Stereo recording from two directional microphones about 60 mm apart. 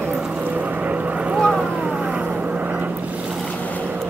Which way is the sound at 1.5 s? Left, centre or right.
Centre.